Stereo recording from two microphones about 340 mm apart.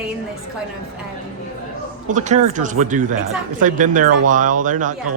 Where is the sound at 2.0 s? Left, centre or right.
Right.